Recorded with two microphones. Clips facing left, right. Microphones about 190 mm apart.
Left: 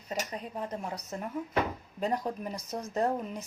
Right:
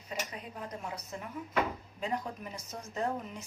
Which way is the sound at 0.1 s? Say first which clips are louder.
Left 5 dB; 35° left (ahead or behind).